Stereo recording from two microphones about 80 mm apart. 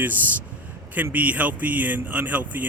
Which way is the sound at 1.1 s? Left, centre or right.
Centre.